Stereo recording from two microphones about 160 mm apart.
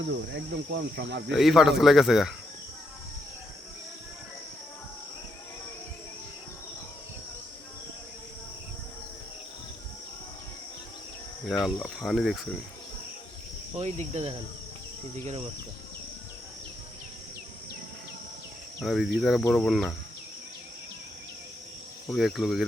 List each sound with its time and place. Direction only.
0.3 s cricket: 90° right
1.3 s speech: centre (ahead or behind)
11.6 s speech: centre (ahead or behind)
13.7 s cricket: 40° right (ahead or behind)
18.8 s speech: centre (ahead or behind)
22.1 s speech: centre (ahead or behind)